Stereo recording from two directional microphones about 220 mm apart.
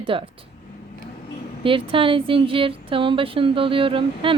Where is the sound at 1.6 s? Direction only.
25° right (ahead or behind).